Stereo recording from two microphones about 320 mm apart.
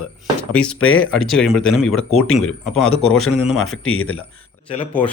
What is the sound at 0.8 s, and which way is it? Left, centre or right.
Speech, left.